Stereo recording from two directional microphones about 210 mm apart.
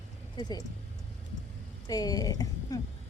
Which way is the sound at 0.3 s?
20° left (ahead or behind).